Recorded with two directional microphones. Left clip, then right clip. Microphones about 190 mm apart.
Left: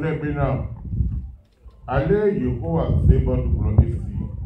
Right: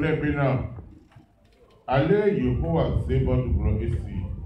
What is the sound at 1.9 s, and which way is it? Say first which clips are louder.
A man's voice: left 1 dB; 15° left (ahead or behind).